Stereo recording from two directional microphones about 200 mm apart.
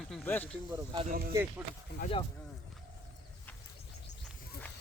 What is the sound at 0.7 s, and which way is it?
Speech, 25° right (ahead or behind).